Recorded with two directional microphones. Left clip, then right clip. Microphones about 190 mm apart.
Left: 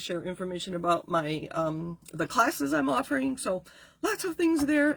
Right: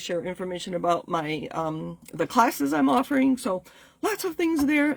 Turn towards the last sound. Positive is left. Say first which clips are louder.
# right 2 dB
turn(degrees=-45)  # may be behind; listen again after turning